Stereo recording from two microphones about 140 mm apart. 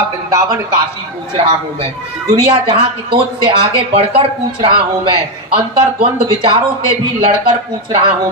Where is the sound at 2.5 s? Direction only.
40° right (ahead or behind).